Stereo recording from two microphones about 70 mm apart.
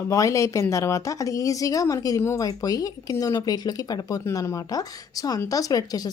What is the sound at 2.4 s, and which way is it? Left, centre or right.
Speech, left.